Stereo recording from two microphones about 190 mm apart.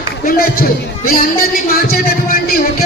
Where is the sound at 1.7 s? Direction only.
50° left (ahead or behind).